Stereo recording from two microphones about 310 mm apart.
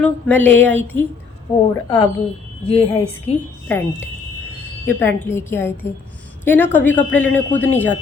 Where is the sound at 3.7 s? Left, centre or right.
Centre.